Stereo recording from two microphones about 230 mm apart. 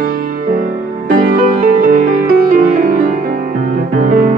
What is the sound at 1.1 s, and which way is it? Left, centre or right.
Music, right.